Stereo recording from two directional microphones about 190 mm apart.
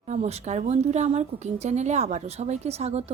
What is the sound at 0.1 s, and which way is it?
Speech, 35° right (ahead or behind).